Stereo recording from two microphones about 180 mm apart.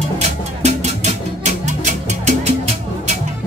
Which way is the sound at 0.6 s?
40° right (ahead or behind).